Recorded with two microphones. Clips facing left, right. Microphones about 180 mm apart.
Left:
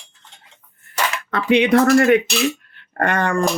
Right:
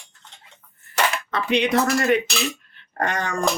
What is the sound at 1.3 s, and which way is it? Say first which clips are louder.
Speech: left 7 dB; 55° left (ahead or behind).